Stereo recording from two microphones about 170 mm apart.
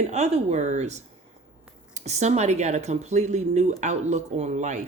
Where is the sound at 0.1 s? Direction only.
40° right (ahead or behind).